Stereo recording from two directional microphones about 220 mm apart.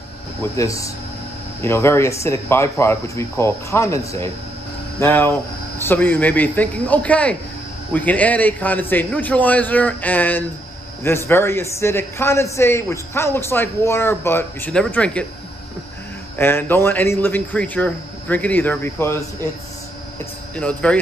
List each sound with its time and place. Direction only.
0.4 s a man's voice: 15° left (ahead or behind)
16.3 s a man's voice: 10° left (ahead or behind)
20.5 s speech: 5° left (ahead or behind)